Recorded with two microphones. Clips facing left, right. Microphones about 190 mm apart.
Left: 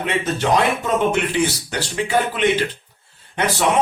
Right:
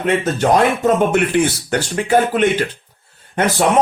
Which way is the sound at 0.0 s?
45° right (ahead or behind).